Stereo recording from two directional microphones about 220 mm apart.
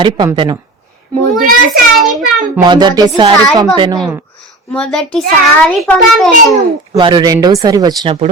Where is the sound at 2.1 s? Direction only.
Centre (ahead or behind).